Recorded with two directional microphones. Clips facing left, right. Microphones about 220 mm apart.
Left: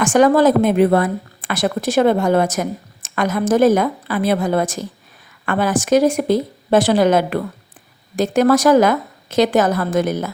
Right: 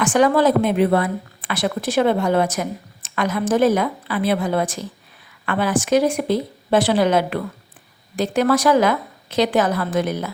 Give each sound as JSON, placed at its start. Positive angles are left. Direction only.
{"t": 0.0, "sound": "a woman's voice", "side_deg": 45}